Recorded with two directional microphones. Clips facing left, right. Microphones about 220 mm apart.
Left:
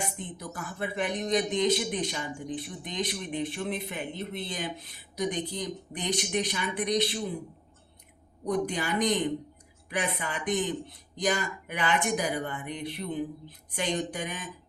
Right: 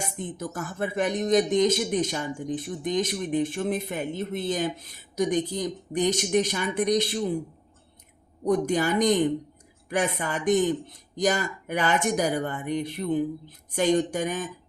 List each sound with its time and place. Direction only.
0.0 s speech: 45° right (ahead or behind)
8.4 s speech: 45° right (ahead or behind)